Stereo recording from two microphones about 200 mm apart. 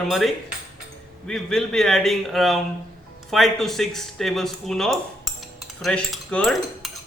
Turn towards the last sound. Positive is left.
turn(degrees=0)  # may be behind; listen again after turning